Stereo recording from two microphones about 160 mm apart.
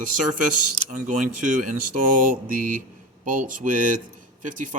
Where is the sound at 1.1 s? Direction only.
50° right (ahead or behind).